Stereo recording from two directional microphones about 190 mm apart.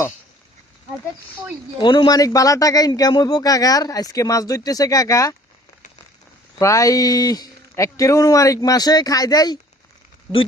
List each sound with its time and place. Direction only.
1.8 s a man's voice: 25° left (ahead or behind)
6.6 s a man's voice: 15° left (ahead or behind)